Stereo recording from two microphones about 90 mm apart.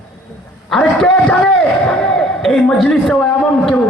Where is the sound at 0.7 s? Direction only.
5° left (ahead or behind).